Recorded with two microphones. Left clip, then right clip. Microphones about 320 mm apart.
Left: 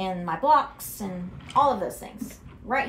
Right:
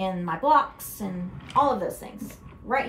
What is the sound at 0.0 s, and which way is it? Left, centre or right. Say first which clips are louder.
A woman's voice: even; centre.